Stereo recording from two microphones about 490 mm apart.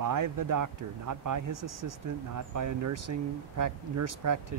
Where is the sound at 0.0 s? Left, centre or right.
Right.